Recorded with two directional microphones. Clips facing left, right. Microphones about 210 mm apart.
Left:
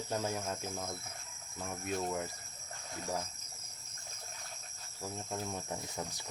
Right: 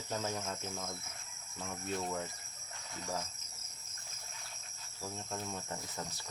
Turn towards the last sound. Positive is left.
turn(degrees=15)  # may be behind; listen again after turning